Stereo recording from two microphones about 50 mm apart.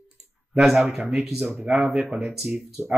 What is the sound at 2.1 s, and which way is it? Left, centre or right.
Speech, centre.